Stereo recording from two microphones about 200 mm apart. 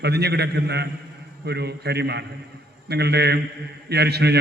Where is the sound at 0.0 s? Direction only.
55° right (ahead or behind).